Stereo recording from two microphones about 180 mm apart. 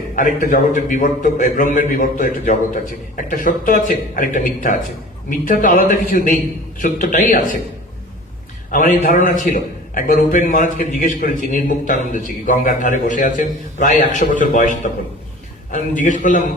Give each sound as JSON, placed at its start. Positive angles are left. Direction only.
{"t": 0.2, "sound": "a man's voice", "side_deg": 45}
{"t": 8.7, "sound": "a man's voice", "side_deg": 50}